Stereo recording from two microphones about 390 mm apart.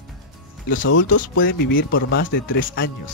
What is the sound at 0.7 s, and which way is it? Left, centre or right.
Speech, left.